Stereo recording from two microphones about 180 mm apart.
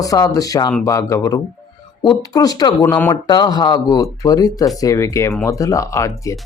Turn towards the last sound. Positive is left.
turn(degrees=15)  # may be behind; listen again after turning